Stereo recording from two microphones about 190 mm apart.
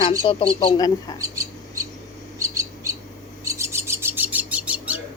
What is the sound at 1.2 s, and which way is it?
Bird, 15° right (ahead or behind).